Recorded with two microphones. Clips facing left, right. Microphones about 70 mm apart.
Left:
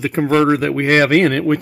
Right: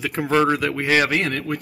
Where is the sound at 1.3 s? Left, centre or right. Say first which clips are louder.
Left 9 dB; left.